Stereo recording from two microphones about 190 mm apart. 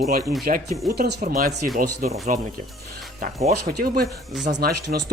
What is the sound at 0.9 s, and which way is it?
Speech, 50° right (ahead or behind).